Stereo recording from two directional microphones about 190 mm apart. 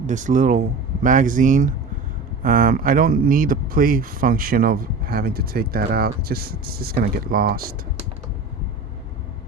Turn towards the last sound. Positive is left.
turn(degrees=-50)  # may be behind; listen again after turning